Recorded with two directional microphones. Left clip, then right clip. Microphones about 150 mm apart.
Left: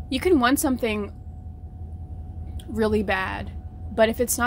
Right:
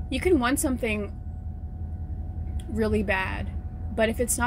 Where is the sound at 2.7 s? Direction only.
25° left (ahead or behind).